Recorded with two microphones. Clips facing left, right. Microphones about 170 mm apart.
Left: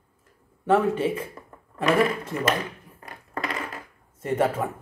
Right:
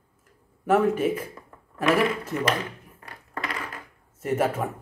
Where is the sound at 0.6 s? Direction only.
10° right (ahead or behind).